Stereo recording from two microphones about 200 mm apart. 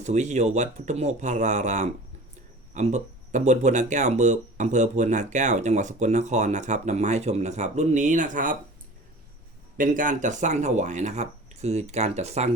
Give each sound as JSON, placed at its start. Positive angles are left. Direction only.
{"t": 0.0, "sound": "speech", "side_deg": -35}
{"t": 9.7, "sound": "speech", "side_deg": -40}